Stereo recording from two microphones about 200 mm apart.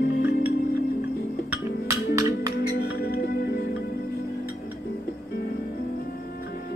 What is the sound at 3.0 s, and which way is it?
Music, 50° left (ahead or behind).